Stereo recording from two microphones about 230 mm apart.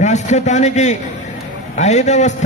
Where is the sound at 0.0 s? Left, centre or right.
Left.